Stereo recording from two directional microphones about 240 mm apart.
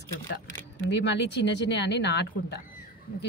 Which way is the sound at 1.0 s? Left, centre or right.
Left.